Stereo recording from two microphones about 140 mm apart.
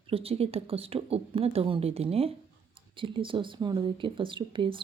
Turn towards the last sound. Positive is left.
turn(degrees=-35)  # may be behind; listen again after turning